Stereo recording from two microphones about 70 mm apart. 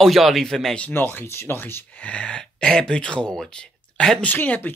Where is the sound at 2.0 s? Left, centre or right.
Centre.